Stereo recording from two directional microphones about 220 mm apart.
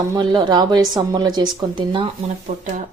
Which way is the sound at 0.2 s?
20° right (ahead or behind).